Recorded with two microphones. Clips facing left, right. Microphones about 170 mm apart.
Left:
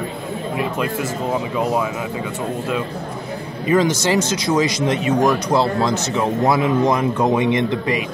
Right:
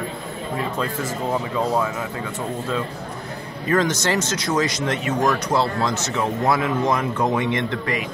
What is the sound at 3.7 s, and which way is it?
Speech, 10° left (ahead or behind).